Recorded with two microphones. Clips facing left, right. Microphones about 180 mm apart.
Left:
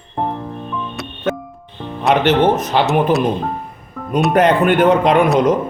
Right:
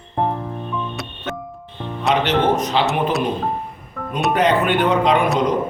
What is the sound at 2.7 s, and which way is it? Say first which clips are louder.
Speech: left 3 dB; 55° left (ahead or behind).